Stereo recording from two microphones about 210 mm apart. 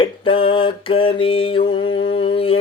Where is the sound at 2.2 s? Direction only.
25° left (ahead or behind).